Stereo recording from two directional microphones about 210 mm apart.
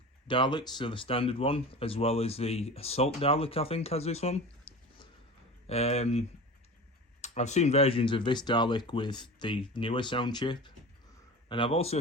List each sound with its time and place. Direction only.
0.3 s speech: 25° left (ahead or behind)